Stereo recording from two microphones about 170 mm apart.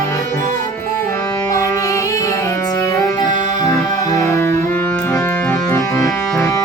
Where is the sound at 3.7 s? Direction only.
15° left (ahead or behind).